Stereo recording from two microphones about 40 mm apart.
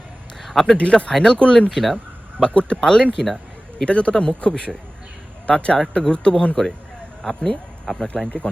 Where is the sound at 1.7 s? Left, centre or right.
Centre.